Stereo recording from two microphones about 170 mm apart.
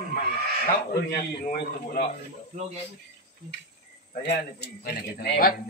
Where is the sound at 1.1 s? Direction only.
65° left (ahead or behind).